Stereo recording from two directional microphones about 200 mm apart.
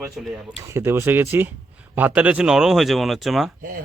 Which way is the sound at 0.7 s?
10° right (ahead or behind).